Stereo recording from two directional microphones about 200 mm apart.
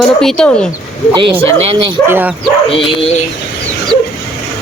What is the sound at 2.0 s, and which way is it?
Speech, 10° right (ahead or behind).